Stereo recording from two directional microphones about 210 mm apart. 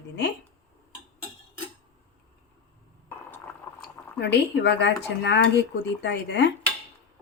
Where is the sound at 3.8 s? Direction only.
55° left (ahead or behind).